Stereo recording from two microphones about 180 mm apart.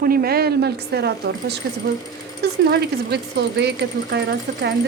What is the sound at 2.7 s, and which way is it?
Speech, 65° right (ahead or behind).